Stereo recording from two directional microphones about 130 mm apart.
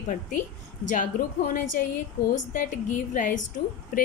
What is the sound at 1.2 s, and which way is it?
A woman's voice, 90° left.